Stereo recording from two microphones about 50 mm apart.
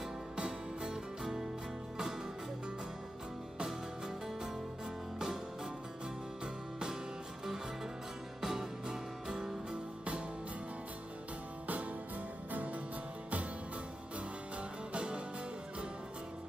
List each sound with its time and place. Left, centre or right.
0.4 s music: centre
6.4 s music: centre
8.4 s music: centre
11.6 s music: right
14.9 s music: right